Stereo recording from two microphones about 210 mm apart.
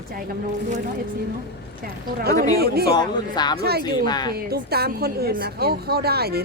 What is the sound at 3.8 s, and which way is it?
Speech, 20° left (ahead or behind).